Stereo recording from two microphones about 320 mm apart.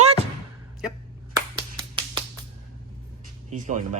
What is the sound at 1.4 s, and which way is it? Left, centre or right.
Finger snapping, centre.